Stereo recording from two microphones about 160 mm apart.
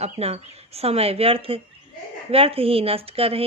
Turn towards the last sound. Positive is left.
turn(degrees=-35)  # may be behind; listen again after turning